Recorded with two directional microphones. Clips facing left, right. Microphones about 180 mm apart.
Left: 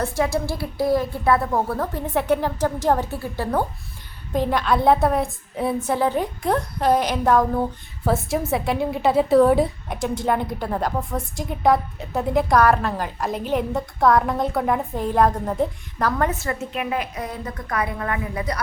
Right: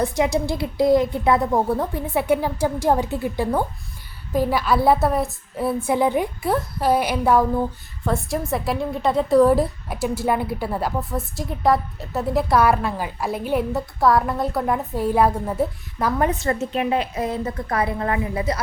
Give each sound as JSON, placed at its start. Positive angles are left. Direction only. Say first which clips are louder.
{"t": 0.0, "sound": "a woman's voice", "louder": "right 2 dB", "side_deg": -15}
{"t": 5.9, "sound": "a woman's voice", "louder": "right 4 dB", "side_deg": -15}
{"t": 8.0, "sound": "a woman's voice", "louder": "left 2 dB", "side_deg": 0}
{"t": 16.3, "sound": "a woman's voice", "louder": "right 4 dB", "side_deg": -35}